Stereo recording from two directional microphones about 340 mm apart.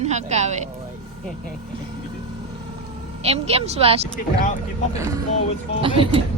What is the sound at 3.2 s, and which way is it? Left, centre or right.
Speech, centre.